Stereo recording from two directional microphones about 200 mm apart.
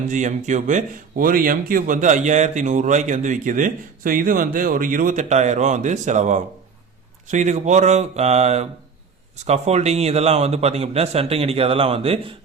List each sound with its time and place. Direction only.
0.1 s speech: 35° right (ahead or behind)